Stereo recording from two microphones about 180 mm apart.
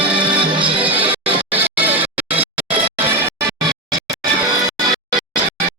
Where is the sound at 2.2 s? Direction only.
10° right (ahead or behind).